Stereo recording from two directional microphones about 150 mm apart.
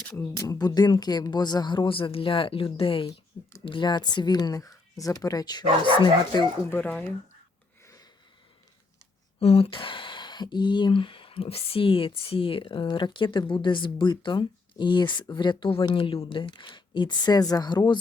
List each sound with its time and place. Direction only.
0.3 s speech: 25° left (ahead or behind)
6.7 s speech: 10° left (ahead or behind)
9.4 s speech: 40° left (ahead or behind)